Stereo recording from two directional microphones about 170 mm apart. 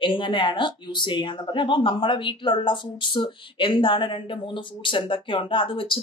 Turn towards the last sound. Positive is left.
turn(degrees=30)  # may be behind; listen again after turning